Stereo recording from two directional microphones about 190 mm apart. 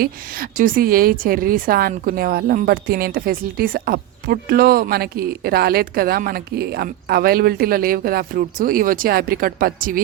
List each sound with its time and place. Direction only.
0.0 s a woman's voice: 45° right (ahead or behind)